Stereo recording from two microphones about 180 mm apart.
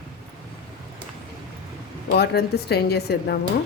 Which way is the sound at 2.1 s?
65° left (ahead or behind).